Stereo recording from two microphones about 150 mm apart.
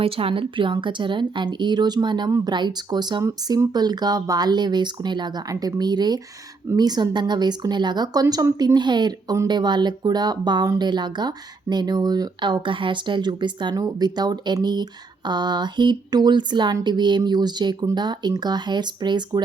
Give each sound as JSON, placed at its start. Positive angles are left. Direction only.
{"t": 0.0, "sound": "speech", "side_deg": -40}